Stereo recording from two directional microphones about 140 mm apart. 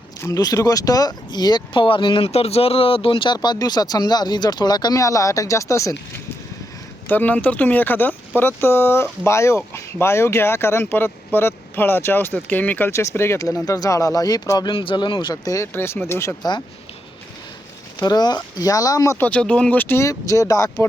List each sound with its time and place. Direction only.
0.2 s speech: 30° left (ahead or behind)
14.7 s speech: 40° left (ahead or behind); by 16.3 s 15° left (ahead or behind)
16.4 s speech: 30° left (ahead or behind)
18.0 s speech: 30° left (ahead or behind)
19.2 s speech: 10° left (ahead or behind); by 20.8 s 25° left (ahead or behind)